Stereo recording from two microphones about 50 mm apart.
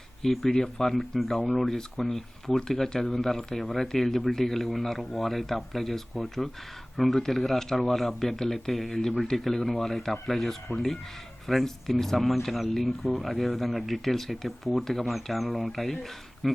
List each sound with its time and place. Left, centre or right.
0.2 s speech: centre
1.4 s speech: centre
1.6 s speech: centre